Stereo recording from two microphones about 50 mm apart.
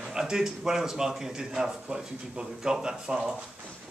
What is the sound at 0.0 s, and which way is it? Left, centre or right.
Speech, centre.